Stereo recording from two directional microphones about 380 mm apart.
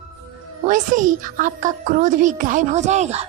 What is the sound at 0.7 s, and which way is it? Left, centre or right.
A woman's voice, centre.